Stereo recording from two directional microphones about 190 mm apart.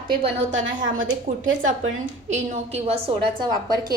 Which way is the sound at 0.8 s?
45° right (ahead or behind).